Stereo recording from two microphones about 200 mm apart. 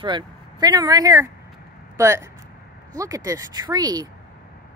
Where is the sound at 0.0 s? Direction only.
20° right (ahead or behind).